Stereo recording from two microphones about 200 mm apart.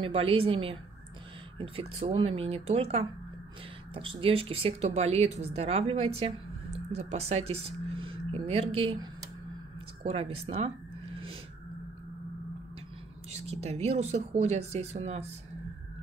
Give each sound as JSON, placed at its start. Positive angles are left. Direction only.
{"t": 0.0, "sound": "speech", "side_deg": -30}
{"t": 13.3, "sound": "speech", "side_deg": -35}